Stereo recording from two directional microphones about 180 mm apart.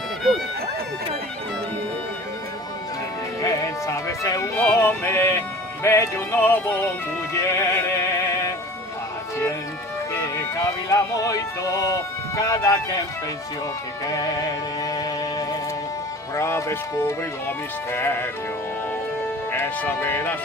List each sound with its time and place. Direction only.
3.4 s speech: 20° left (ahead or behind)
5.8 s music: 15° left (ahead or behind)
10.1 s music: 15° left (ahead or behind)
14.8 s music: 20° left (ahead or behind)
19.5 s speech: 10° left (ahead or behind)